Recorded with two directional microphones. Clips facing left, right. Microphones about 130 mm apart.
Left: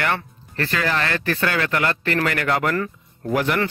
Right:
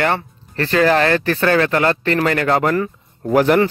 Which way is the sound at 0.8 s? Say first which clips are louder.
Right 9 dB; 40° right (ahead or behind).